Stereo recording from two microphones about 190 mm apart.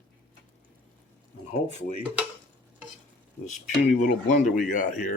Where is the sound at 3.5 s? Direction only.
40° left (ahead or behind).